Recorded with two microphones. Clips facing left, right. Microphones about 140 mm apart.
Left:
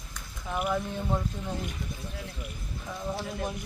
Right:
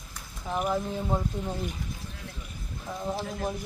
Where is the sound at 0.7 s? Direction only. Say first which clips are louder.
Right 1 dB; 15° right (ahead or behind).